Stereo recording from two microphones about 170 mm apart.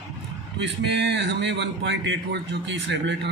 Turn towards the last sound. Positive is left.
turn(degrees=-90)